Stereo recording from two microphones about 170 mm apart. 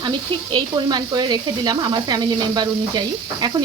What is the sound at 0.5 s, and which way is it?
Speech, 25° right (ahead or behind).